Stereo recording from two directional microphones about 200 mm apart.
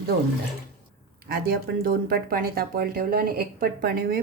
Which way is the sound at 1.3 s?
50° right (ahead or behind).